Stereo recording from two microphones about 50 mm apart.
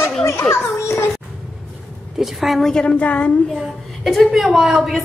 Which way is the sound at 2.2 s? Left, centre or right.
Centre.